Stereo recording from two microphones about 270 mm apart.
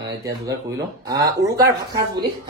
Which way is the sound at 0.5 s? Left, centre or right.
Right.